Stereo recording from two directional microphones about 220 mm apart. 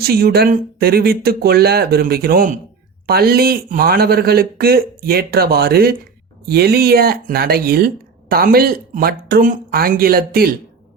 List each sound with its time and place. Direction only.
0.0 s speech: 45° right (ahead or behind)